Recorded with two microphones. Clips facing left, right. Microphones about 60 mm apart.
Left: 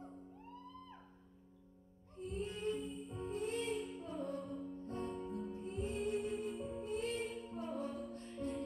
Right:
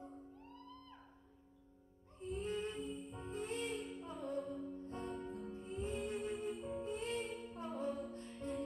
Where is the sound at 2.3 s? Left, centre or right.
Right.